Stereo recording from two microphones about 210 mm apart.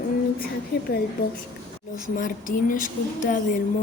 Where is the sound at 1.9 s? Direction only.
40° left (ahead or behind).